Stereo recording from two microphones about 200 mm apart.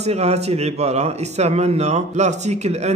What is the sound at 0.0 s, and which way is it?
Speech, 30° right (ahead or behind).